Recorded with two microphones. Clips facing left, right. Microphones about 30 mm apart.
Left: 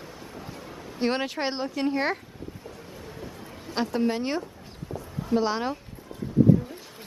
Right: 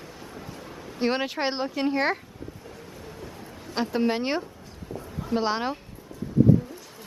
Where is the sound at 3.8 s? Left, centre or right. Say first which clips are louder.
Right 1 dB; right.